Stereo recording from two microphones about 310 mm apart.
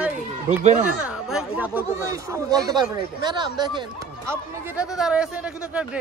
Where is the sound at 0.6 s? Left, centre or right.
Right.